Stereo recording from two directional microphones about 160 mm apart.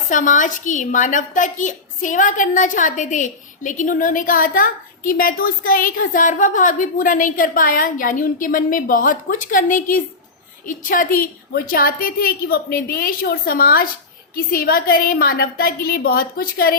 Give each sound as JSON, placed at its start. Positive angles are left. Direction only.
{"t": 0.1, "sound": "a woman's voice", "side_deg": 55}